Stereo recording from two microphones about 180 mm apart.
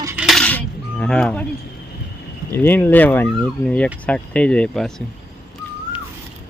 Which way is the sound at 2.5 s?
10° left (ahead or behind).